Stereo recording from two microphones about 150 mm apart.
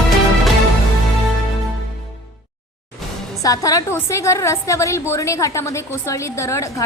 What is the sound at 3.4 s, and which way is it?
A woman's voice, 25° left (ahead or behind).